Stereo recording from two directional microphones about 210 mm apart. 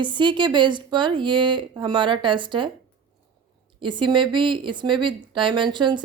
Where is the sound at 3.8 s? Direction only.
20° right (ahead or behind).